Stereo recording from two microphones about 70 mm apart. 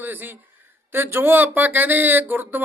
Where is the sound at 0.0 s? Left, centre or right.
Right.